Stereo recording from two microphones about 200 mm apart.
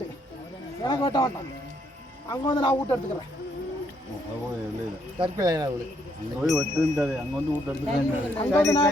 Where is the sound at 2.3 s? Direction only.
20° left (ahead or behind).